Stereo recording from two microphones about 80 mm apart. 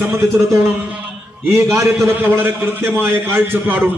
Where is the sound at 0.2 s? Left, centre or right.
Right.